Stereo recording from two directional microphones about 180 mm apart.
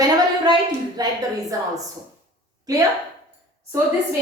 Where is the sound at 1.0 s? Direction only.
20° right (ahead or behind).